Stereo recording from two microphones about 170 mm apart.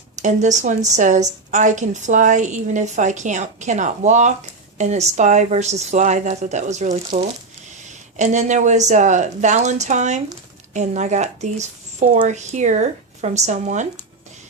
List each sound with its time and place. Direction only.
0.2 s a woman's voice: 45° right (ahead or behind)